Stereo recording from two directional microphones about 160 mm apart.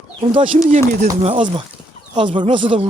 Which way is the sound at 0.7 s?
55° right (ahead or behind).